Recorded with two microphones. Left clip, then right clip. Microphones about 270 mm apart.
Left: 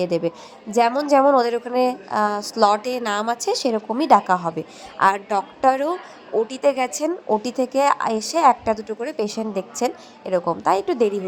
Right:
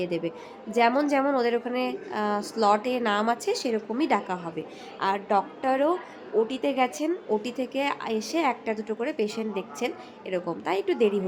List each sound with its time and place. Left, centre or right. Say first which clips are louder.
0.0 s a woman's voice: left 8 dB; left